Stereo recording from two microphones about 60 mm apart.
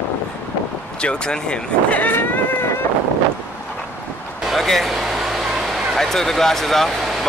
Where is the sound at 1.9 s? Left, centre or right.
Left.